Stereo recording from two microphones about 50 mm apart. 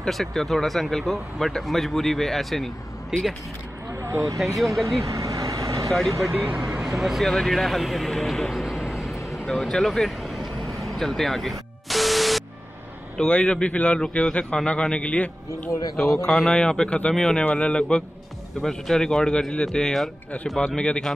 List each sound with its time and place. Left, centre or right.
0.0 s speech: centre
4.4 s speech: centre
4.8 s vehicle: right
5.9 s speech: centre
6.3 s speech: right
6.8 s speech: centre
9.5 s vehicle: centre
13.2 s a man's voice: centre
16.1 s speech: centre
16.4 s speech: centre
17.5 s a man's voice: left
18.6 s a man's voice: centre